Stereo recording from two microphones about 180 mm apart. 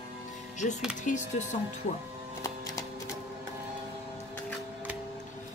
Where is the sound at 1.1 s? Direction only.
45° left (ahead or behind).